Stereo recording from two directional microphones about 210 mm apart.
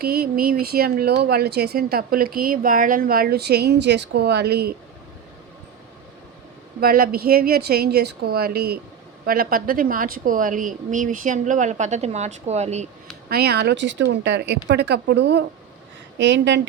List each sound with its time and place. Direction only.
0.0 s speech: 45° right (ahead or behind)
6.7 s speech: 45° right (ahead or behind)
13.3 s speech: 50° right (ahead or behind)